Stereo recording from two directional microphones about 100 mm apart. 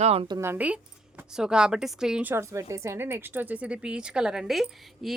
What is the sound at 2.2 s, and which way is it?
Speech, 30° right (ahead or behind).